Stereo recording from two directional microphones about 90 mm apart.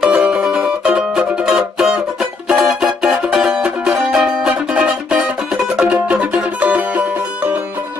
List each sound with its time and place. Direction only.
0.0 s music: 10° right (ahead or behind)